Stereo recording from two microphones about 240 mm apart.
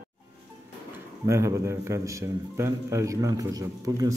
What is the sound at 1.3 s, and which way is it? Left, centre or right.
A man's voice, centre.